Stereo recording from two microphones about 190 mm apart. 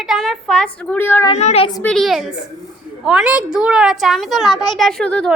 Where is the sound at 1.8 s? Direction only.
Centre (ahead or behind).